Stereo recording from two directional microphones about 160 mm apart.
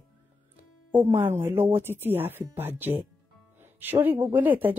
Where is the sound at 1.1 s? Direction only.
15° right (ahead or behind).